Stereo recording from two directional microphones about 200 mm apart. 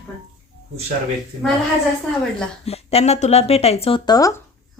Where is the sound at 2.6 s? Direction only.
30° left (ahead or behind).